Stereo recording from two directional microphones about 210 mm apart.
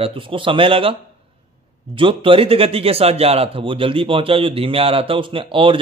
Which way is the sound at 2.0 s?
25° right (ahead or behind).